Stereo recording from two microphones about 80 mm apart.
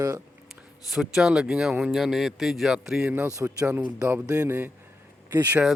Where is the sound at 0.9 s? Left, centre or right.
Centre.